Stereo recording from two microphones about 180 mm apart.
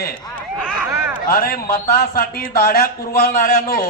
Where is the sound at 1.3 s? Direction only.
55° left (ahead or behind).